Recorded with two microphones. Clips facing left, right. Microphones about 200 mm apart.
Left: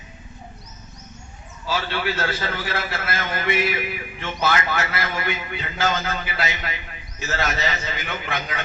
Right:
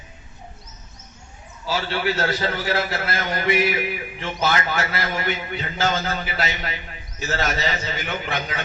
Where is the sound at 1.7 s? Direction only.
40° right (ahead or behind).